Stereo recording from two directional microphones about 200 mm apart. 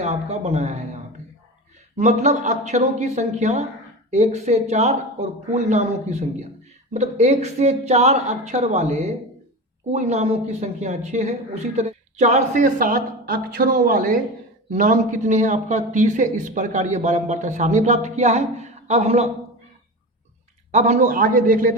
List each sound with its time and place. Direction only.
0.0 s a man's voice: 30° right (ahead or behind)
20.7 s a man's voice: 35° right (ahead or behind)